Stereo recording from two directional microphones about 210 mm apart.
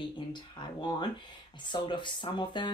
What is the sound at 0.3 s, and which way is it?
Speech, 20° left (ahead or behind).